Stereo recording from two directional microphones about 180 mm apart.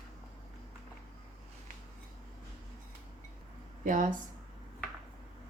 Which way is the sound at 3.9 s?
50° right (ahead or behind).